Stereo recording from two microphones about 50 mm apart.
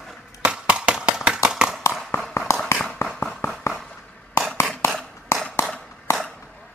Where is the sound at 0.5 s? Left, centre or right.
Right.